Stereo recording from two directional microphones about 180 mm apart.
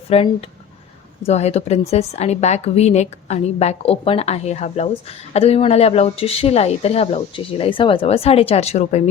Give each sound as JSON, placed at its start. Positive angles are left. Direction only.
{"t": 0.1, "sound": "a woman's voice", "side_deg": 35}